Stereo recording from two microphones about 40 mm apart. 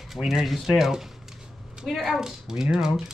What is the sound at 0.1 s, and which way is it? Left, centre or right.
Speech, centre.